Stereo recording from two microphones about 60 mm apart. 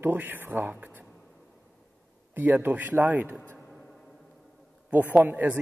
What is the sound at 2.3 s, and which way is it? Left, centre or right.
A man's voice, right.